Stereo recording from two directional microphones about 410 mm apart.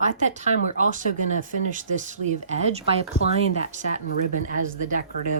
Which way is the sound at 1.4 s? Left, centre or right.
Centre.